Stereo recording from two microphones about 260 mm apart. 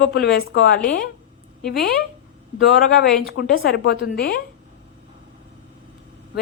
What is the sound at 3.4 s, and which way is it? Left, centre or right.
Speech, left.